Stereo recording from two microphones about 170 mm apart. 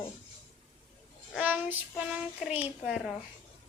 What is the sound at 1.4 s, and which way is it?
A child's voice, 10° right (ahead or behind).